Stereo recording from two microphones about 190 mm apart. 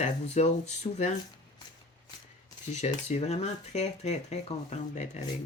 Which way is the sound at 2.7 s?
35° left (ahead or behind).